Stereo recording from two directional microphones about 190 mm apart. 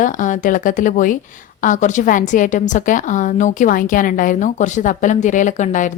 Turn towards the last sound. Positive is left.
turn(degrees=40)  # may be behind; listen again after turning